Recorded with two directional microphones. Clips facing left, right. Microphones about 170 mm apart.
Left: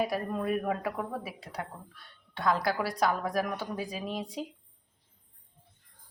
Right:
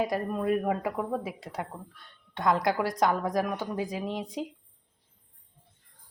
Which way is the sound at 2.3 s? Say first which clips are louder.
Right 3 dB; 15° right (ahead or behind).